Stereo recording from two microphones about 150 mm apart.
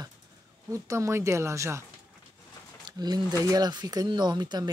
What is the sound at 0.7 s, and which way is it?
Speech, 20° right (ahead or behind).